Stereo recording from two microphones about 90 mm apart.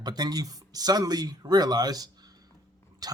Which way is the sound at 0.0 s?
50° right (ahead or behind).